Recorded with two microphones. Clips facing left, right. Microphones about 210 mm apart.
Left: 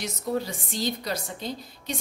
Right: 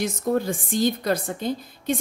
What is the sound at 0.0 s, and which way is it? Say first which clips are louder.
A woman's voice: right 6 dB; 50° right (ahead or behind).